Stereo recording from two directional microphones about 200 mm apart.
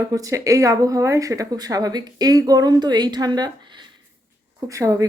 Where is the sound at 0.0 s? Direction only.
15° right (ahead or behind).